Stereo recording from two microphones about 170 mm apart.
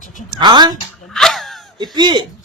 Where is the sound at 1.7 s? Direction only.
25° right (ahead or behind).